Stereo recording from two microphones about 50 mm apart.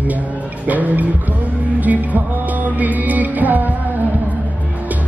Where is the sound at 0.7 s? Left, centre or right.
Right.